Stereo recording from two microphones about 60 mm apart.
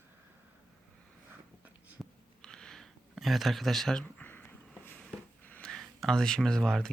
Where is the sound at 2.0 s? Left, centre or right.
Centre.